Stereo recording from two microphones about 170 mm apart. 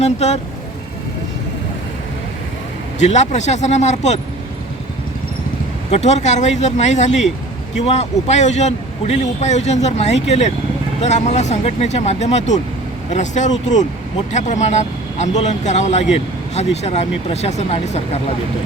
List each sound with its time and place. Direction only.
0.0 s speech: 40° left (ahead or behind)
3.0 s speech: 40° left (ahead or behind)
5.9 s speech: 40° left (ahead or behind)